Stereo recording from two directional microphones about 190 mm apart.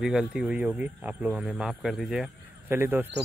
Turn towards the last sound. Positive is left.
turn(degrees=-10)  # may be behind; listen again after turning